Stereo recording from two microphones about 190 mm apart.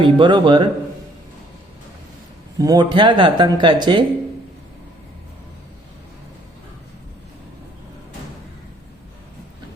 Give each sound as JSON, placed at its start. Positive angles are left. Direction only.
{"t": 0.0, "sound": "speech", "side_deg": -25}
{"t": 2.6, "sound": "speech", "side_deg": -20}